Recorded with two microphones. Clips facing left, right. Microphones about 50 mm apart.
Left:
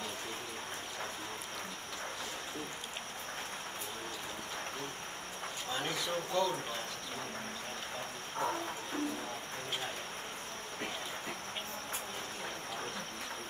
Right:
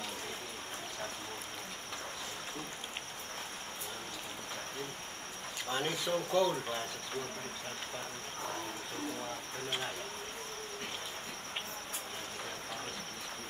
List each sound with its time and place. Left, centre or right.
5.7 s speech: right